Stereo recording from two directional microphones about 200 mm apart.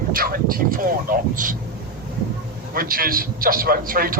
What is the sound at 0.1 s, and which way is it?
A man's voice, 45° right (ahead or behind).